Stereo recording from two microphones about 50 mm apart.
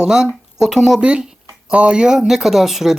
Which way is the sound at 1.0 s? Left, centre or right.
Right.